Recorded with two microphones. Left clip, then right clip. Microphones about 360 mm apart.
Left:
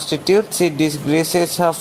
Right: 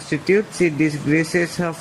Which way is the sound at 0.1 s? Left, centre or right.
Left.